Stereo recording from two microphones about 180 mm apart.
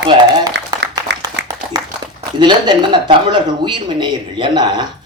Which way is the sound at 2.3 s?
25° right (ahead or behind).